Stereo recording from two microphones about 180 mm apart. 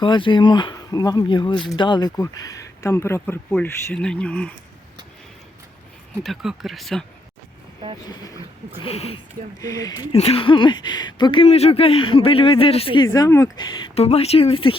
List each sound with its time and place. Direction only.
0.0 s speech: 25° left (ahead or behind); by 4.5 s 5° left (ahead or behind)
6.2 s speech: centre (ahead or behind)
8.8 s speech: 35° left (ahead or behind)
9.6 s speech: 20° left (ahead or behind)
10.1 s speech: 30° left (ahead or behind)
13.1 s speech: 15° left (ahead or behind)